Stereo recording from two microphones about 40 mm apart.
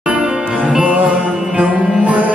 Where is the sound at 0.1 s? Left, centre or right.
Right.